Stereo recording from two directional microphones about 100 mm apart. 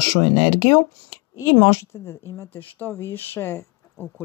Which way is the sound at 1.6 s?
25° left (ahead or behind).